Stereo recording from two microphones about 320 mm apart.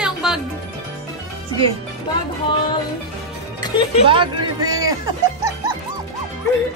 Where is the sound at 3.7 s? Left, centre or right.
Centre.